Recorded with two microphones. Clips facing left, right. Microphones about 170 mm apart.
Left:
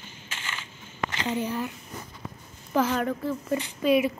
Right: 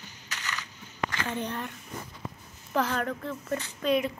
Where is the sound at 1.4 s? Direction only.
5° left (ahead or behind).